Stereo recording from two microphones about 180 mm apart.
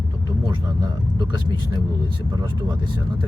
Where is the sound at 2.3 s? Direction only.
20° right (ahead or behind).